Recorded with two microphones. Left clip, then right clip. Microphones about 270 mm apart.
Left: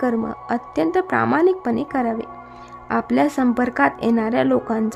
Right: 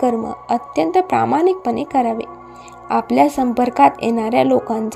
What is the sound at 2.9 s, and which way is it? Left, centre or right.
Speech, centre.